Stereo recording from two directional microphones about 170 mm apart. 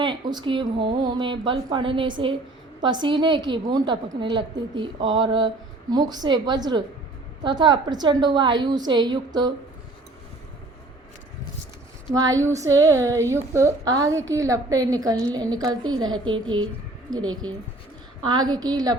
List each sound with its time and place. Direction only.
0.0 s a woman's voice: 25° right (ahead or behind)
12.1 s a woman's voice: 20° right (ahead or behind)
18.3 s a woman's voice: 25° right (ahead or behind)